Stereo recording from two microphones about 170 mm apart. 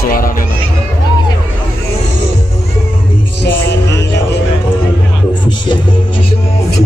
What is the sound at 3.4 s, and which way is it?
Music, 90° left.